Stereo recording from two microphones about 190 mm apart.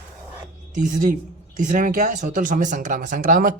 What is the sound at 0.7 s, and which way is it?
A woman's voice, 40° right (ahead or behind).